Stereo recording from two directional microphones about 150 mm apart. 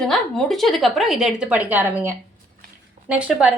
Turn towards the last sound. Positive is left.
turn(degrees=-10)  # may be behind; listen again after turning